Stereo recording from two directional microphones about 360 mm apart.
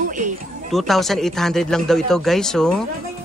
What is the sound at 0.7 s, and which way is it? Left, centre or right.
A man's voice, centre.